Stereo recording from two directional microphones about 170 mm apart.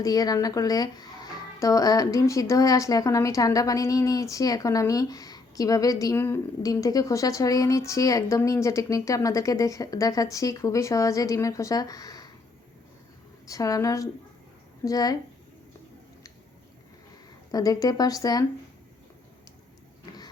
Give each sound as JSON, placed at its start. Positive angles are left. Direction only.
{"t": 0.0, "sound": "speech", "side_deg": 20}
{"t": 13.5, "sound": "speech", "side_deg": 20}
{"t": 17.5, "sound": "speech", "side_deg": 20}